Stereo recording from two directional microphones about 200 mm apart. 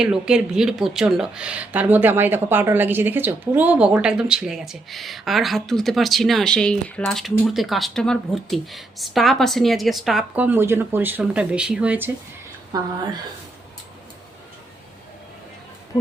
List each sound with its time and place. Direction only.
0.0 s speech: 5° right (ahead or behind)